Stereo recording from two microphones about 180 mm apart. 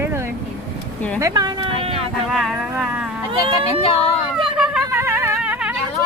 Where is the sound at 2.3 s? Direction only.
Centre (ahead or behind).